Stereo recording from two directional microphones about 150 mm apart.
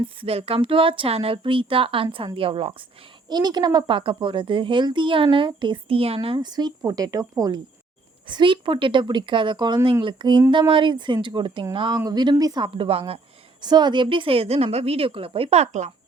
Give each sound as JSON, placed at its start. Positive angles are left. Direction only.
{"t": 0.2, "sound": "a woman's voice", "side_deg": -40}
{"t": 3.2, "sound": "a woman's voice", "side_deg": -30}
{"t": 13.6, "sound": "a woman's voice", "side_deg": -30}